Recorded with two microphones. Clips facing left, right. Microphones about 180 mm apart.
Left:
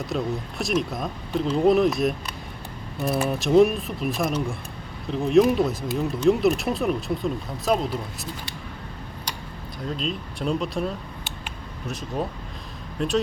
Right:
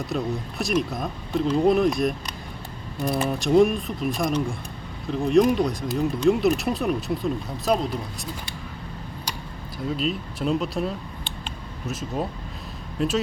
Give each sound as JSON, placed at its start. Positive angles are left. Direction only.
{"t": 0.1, "sound": "speech", "side_deg": 0}
{"t": 10.0, "sound": "speech", "side_deg": -5}